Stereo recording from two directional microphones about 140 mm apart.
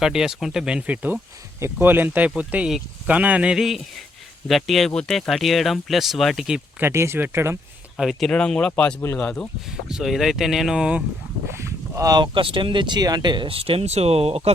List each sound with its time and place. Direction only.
0.0 s speech: 5° right (ahead or behind)
6.8 s speech: 20° right (ahead or behind)
7.9 s speech: centre (ahead or behind)
9.6 s speech: 5° right (ahead or behind)
11.4 s speech: 20° right (ahead or behind); by 14.5 s 45° right (ahead or behind)